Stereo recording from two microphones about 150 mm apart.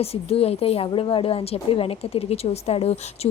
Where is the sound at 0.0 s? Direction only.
40° left (ahead or behind).